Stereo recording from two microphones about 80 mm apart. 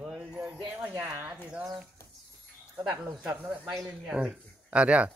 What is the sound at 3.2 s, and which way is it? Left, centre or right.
A man's voice, centre.